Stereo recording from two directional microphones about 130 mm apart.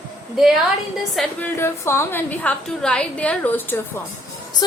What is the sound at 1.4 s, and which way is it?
A woman's voice, 20° left (ahead or behind).